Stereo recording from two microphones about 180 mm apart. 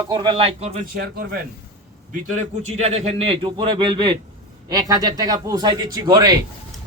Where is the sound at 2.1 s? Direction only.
40° right (ahead or behind).